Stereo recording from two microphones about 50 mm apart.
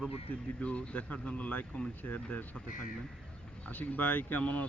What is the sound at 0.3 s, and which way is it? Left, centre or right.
Speech, left.